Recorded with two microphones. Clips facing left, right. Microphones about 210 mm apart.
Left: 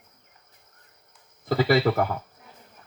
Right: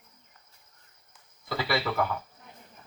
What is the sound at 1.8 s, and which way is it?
Speech, 40° left (ahead or behind).